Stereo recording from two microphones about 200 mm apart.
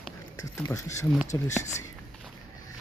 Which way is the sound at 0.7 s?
15° left (ahead or behind).